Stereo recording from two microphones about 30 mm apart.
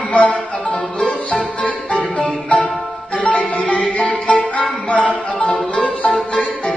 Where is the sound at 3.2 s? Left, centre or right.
Left.